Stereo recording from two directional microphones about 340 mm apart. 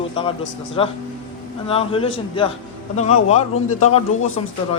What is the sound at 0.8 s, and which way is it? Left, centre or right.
Speech, centre.